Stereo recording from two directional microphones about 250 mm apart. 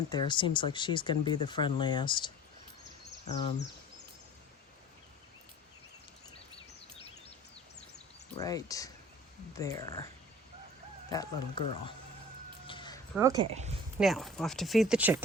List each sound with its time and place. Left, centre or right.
0.1 s speech: centre
8.4 s speech: centre
11.1 s speech: centre
12.6 s a sound: centre
13.1 s speech: centre
14.0 s speech: centre